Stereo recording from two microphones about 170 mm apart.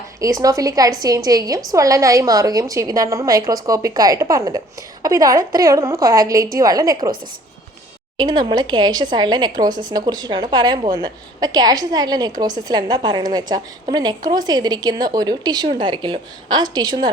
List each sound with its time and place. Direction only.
0.2 s a woman's voice: 20° right (ahead or behind)
8.2 s a woman's voice: 25° right (ahead or behind)